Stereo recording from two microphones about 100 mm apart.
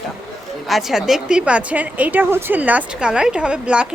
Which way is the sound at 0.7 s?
5° right (ahead or behind).